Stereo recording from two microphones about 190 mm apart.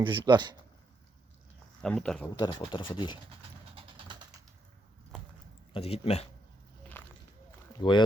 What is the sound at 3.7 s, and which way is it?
Vehicle, 30° right (ahead or behind).